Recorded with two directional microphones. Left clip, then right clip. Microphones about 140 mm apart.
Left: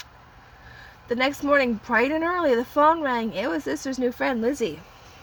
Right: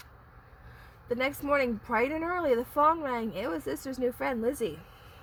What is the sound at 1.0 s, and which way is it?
A woman's voice, 40° left (ahead or behind).